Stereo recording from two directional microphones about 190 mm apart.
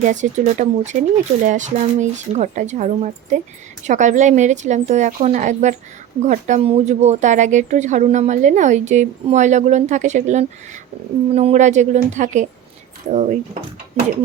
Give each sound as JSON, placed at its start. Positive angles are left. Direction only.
{"t": 0.0, "sound": "speech", "side_deg": -40}